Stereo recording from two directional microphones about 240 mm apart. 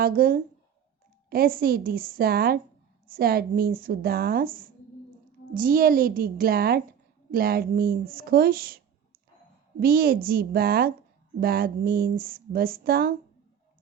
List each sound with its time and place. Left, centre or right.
0.0 s speech: right
9.8 s speech: right